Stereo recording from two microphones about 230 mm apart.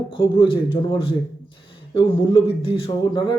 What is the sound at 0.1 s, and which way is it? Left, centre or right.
Speech, left.